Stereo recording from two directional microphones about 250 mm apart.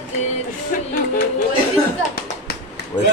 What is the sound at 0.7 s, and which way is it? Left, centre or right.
Music, left.